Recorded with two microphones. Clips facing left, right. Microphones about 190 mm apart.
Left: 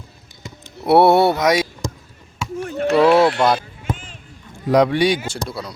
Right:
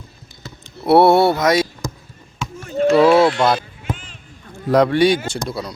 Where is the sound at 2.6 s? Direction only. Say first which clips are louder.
Right 4 dB; 65° left (ahead or behind).